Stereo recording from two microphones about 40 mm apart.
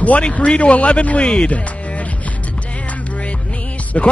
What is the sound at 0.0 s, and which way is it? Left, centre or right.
Speech, left.